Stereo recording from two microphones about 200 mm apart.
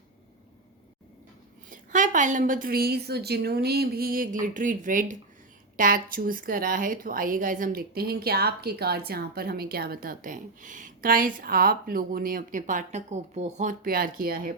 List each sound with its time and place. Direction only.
1.7 s a woman's voice: 40° right (ahead or behind)